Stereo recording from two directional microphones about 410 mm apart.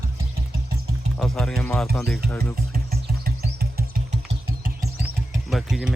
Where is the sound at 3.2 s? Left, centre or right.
Right.